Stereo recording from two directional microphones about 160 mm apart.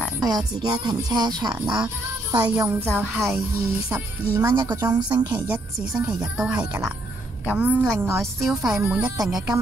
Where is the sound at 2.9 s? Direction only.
15° right (ahead or behind).